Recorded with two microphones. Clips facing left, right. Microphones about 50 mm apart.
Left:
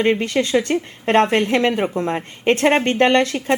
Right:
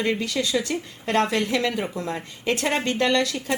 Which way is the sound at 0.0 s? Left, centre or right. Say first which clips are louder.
Left 7 dB; left.